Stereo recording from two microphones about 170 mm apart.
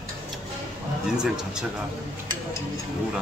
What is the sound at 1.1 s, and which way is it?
Speech, 5° right (ahead or behind).